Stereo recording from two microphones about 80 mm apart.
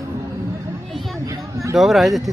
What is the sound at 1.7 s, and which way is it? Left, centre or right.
Speech, centre.